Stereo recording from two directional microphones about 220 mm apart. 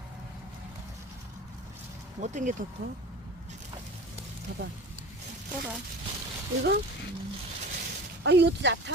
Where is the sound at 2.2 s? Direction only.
35° right (ahead or behind).